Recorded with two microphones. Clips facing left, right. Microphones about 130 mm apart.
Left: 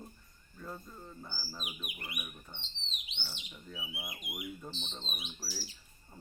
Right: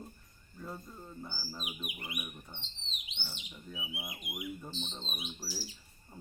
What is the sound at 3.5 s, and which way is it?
Speech, 20° right (ahead or behind).